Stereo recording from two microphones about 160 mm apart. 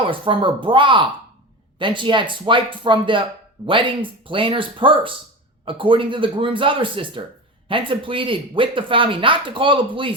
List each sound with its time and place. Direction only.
0.1 s speech: 30° right (ahead or behind)